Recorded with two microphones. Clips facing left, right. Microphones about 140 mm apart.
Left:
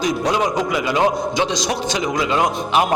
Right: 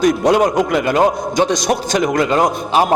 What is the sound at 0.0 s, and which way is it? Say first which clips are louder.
A man's voice: right 6 dB; 55° right (ahead or behind).